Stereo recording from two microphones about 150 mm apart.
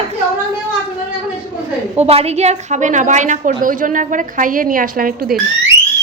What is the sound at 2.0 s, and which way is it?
A woman's voice, 45° right (ahead or behind).